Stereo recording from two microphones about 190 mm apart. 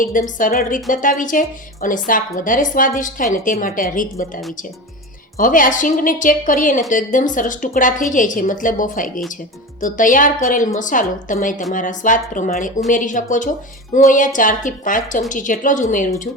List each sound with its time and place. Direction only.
0.0 s a woman's voice: 45° left (ahead or behind)
5.4 s a woman's voice: 45° left (ahead or behind)